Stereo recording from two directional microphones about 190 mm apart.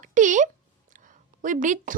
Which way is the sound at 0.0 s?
40° right (ahead or behind).